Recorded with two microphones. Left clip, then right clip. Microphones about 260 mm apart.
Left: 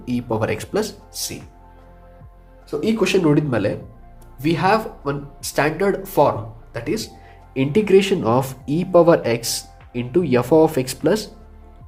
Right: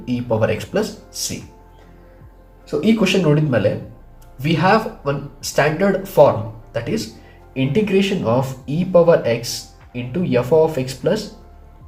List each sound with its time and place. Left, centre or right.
0.0 s speech: left
2.6 s speech: left